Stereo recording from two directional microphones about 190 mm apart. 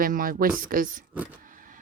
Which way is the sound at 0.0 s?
50° right (ahead or behind).